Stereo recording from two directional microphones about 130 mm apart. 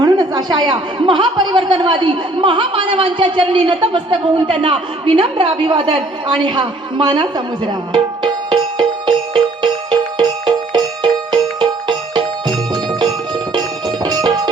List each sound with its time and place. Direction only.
0.0 s speech: 30° right (ahead or behind)
6.4 s music: 35° right (ahead or behind)